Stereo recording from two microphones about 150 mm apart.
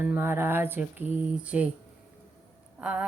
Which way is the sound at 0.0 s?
15° right (ahead or behind).